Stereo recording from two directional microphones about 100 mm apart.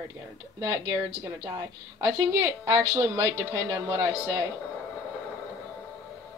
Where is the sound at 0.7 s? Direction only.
35° right (ahead or behind).